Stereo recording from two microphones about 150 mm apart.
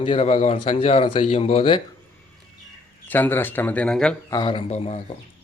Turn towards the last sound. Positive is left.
turn(degrees=50)  # may be behind; listen again after turning